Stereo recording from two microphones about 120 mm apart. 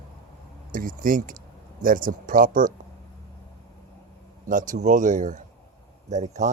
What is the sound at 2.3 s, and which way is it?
Speech, 90° right.